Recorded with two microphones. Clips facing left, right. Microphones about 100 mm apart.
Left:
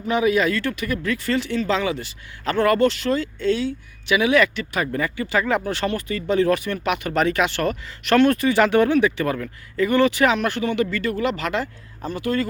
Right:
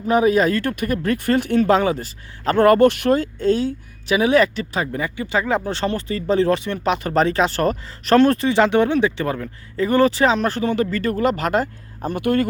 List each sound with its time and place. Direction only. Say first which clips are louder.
0.1 s speech: right 3 dB; 40° right (ahead or behind)
4.8 s speech: left 1 dB; 20° right (ahead or behind); by 12.5 s 55° right (ahead or behind)